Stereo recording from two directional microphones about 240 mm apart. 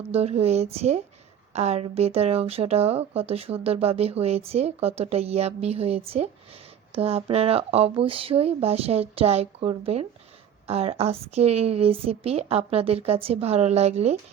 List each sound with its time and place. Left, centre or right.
0.1 s speech: right